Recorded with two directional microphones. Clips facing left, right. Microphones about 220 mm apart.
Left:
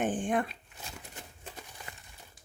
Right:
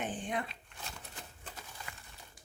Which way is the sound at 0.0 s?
50° left (ahead or behind).